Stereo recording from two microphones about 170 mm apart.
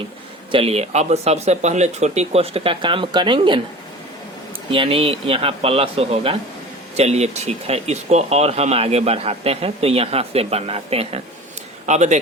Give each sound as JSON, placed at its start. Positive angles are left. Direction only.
{"t": 0.5, "sound": "speech", "side_deg": -35}
{"t": 4.7, "sound": "speech", "side_deg": -30}